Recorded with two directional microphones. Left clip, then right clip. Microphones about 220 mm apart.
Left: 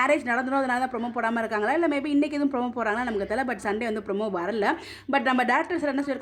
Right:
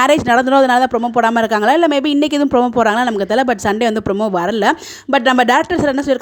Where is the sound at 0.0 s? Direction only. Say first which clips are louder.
Right 12 dB; 40° right (ahead or behind).